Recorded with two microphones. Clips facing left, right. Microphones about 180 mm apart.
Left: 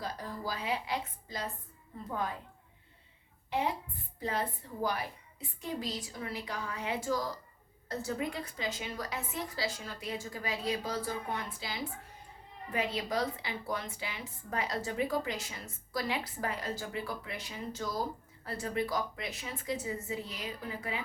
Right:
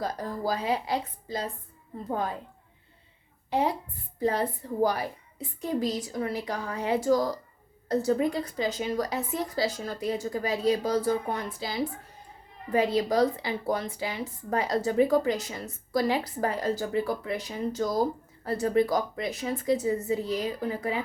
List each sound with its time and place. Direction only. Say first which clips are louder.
0.0 s a woman's voice: right 8 dB; 45° right (ahead or behind)
4.2 s a woman's voice: right 8 dB; 40° right (ahead or behind)